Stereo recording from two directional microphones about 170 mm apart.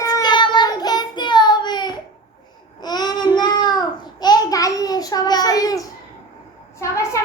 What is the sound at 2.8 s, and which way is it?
Babbling, 25° left (ahead or behind).